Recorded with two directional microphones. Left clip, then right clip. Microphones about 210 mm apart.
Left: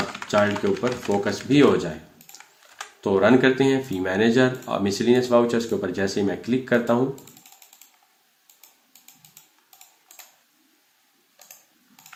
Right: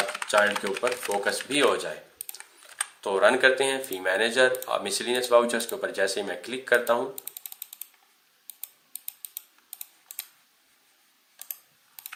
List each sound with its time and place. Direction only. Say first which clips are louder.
0.3 s speech: left 2 dB; 15° right (ahead or behind)
3.0 s speech: left 2 dB; 15° right (ahead or behind)
11.4 s a sound: right 3 dB; 50° right (ahead or behind)